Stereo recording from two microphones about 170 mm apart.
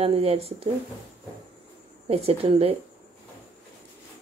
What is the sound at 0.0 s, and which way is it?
Speech, 35° right (ahead or behind).